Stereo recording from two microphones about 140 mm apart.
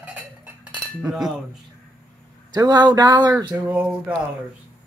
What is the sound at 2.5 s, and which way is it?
Speech, 30° right (ahead or behind).